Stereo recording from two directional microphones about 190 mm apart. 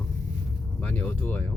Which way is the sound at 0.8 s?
10° left (ahead or behind).